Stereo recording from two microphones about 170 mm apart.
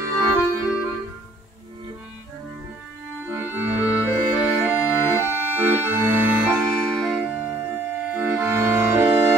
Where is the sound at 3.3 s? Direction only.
15° right (ahead or behind).